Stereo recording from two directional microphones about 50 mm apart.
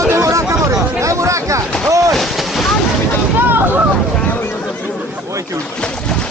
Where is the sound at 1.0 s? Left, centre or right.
Right.